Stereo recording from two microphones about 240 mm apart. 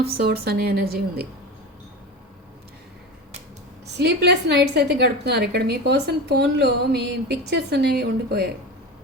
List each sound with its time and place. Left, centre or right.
0.0 s a woman's voice: right
3.8 s a woman's voice: right